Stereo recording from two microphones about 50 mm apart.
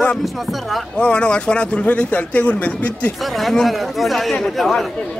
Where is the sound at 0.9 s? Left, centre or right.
Left.